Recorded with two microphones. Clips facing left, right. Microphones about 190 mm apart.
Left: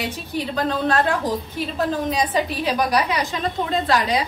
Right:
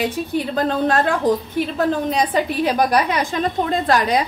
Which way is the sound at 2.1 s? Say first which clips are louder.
Right 3 dB; 55° right (ahead or behind).